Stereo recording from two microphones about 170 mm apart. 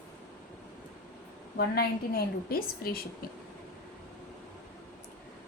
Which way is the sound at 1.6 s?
65° left (ahead or behind).